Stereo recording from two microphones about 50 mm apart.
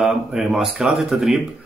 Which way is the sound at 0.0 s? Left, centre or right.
Centre.